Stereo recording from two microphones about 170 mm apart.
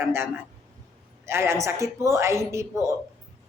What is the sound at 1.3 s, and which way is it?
A woman's voice, 15° right (ahead or behind).